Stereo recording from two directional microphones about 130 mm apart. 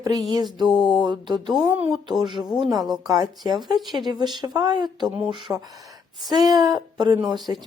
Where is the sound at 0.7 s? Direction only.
Centre (ahead or behind).